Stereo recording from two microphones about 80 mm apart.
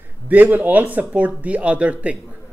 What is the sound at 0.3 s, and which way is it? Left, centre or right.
Speech, right.